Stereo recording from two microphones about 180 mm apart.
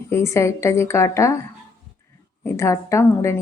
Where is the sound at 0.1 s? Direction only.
15° left (ahead or behind).